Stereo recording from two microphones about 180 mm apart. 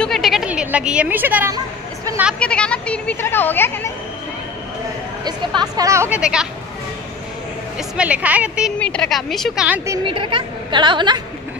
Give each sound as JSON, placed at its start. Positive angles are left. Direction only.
{"t": 0.0, "sound": "speech", "side_deg": 0}
{"t": 2.4, "sound": "speech", "side_deg": 5}
{"t": 5.2, "sound": "speech", "side_deg": -20}
{"t": 8.0, "sound": "speech", "side_deg": -10}
{"t": 8.7, "sound": "a woman's voice", "side_deg": 5}
{"t": 10.0, "sound": "a woman's voice", "side_deg": -30}